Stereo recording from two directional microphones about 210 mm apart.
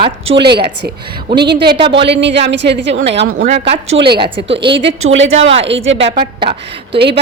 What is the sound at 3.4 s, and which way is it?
Speech, 30° right (ahead or behind).